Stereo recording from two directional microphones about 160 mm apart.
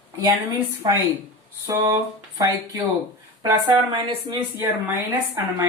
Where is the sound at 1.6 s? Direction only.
15° right (ahead or behind).